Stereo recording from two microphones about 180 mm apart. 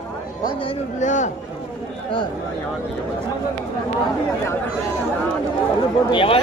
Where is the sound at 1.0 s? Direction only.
45° left (ahead or behind).